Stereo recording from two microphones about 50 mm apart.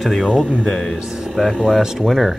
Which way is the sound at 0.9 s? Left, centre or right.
Centre.